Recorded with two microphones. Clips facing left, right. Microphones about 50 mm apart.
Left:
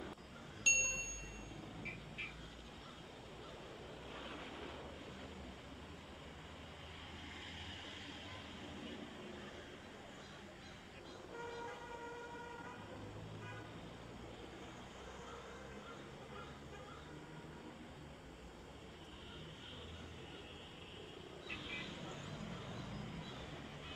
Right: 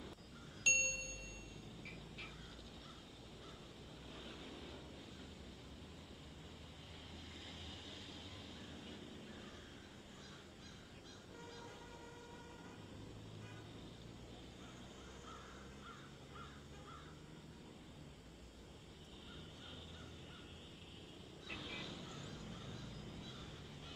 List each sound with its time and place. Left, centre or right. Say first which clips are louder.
0.7 s ding: even; centre
4.2 s vehicle: left 4 dB; left
21.5 s vehicle: left 1 dB; centre; by 23.2 s left